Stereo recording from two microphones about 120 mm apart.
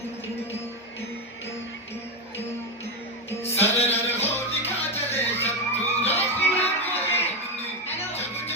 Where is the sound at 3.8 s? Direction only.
60° left (ahead or behind).